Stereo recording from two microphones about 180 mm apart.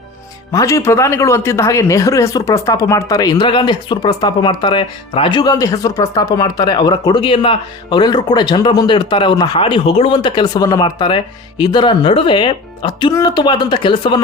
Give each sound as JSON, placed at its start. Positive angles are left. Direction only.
{"t": 0.5, "sound": "speech", "side_deg": 20}